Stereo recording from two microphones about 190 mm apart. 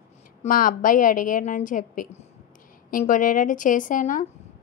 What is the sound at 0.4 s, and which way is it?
A woman's voice, 45° left (ahead or behind).